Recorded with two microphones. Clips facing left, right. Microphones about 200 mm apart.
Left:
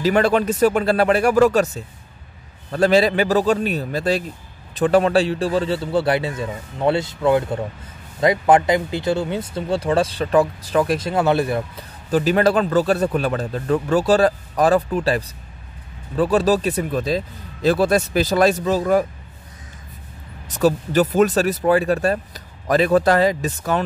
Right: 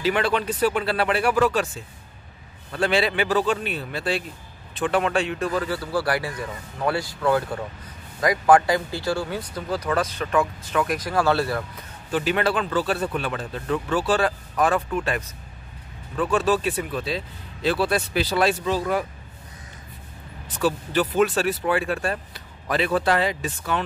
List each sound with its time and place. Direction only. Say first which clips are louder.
0.0 s speech: left 6 dB; 45° left (ahead or behind)
2.7 s speech: left 7 dB; 40° left (ahead or behind); by 11.6 s 20° left (ahead or behind)
12.1 s speech: left 6 dB; 40° left (ahead or behind)
20.4 s speech: left 6 dB; 40° left (ahead or behind)